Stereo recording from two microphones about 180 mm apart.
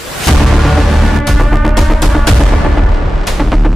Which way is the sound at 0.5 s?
Centre (ahead or behind).